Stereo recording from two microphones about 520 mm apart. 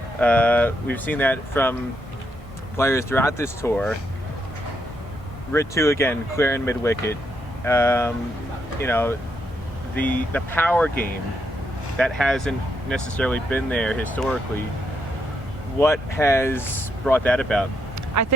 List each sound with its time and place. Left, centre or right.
0.2 s speech: centre
2.7 s speech: centre
5.5 s speech: centre
11.9 s speech: centre
15.8 s speech: centre
18.1 s speech: right